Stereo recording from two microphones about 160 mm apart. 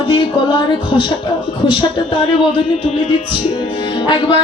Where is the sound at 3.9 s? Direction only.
30° left (ahead or behind).